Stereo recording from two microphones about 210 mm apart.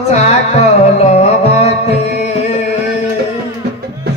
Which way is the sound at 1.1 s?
30° left (ahead or behind).